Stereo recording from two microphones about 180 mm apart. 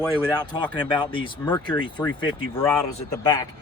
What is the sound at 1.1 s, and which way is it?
Speech, 30° left (ahead or behind).